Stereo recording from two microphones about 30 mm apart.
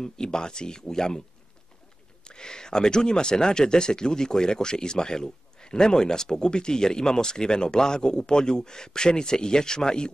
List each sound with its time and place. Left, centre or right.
0.0 s speech: left
2.2 s speech: left